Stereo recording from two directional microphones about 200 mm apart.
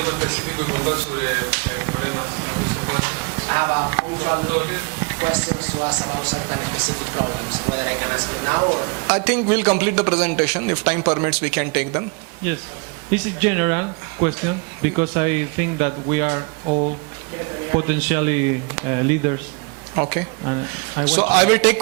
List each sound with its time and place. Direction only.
0.0 s a man's voice: 15° right (ahead or behind)
13.1 s a man's voice: 10° right (ahead or behind)
16.6 s speech: 30° right (ahead or behind)
17.7 s a man's voice: 15° right (ahead or behind)